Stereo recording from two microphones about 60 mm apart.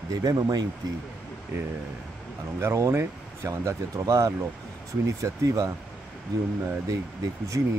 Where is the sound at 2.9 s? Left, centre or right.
Right.